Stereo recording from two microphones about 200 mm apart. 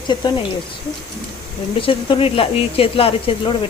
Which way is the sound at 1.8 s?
25° left (ahead or behind).